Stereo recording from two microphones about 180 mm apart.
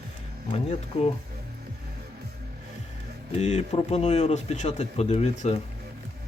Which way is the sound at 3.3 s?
35° left (ahead or behind).